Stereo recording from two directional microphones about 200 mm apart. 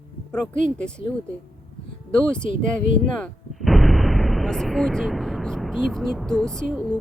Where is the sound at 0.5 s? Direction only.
40° right (ahead or behind).